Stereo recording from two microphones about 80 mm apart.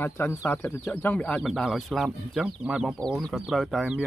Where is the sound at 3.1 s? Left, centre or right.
Centre.